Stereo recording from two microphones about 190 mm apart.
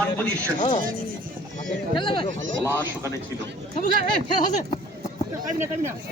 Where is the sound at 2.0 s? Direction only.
25° left (ahead or behind).